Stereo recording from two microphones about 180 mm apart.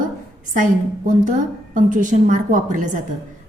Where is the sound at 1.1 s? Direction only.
45° right (ahead or behind).